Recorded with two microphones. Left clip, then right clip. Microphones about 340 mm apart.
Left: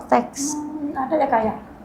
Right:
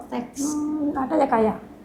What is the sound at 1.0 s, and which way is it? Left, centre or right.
Speech, right.